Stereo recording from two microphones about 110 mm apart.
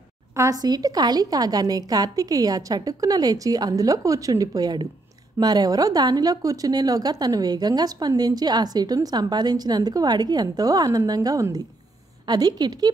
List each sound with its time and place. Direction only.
0.4 s speech: 35° right (ahead or behind)